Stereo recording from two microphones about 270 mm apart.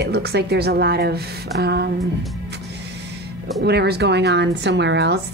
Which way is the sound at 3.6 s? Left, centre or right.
Right.